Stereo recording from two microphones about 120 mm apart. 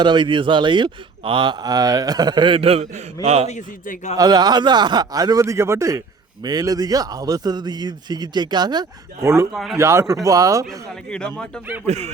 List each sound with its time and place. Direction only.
0.0 s speech: 40° right (ahead or behind)
3.2 s speech: 65° right (ahead or behind)
4.2 s speech: 35° right (ahead or behind)
9.2 s a man's voice: 25° right (ahead or behind)
10.7 s speech: 5° left (ahead or behind)
11.9 s speech: 65° right (ahead or behind)